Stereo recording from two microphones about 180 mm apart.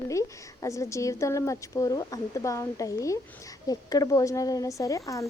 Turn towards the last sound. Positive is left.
turn(degrees=20)  # may be behind; listen again after turning